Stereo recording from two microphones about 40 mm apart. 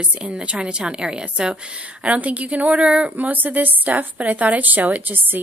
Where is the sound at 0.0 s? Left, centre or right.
Right.